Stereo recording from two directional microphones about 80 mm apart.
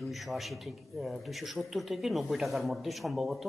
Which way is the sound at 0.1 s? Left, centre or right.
Centre.